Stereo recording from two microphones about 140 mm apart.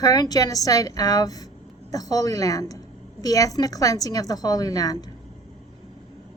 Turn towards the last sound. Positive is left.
turn(degrees=25)  # may be behind; listen again after turning